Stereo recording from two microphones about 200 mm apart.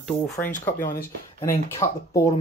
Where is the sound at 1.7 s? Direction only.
15° left (ahead or behind).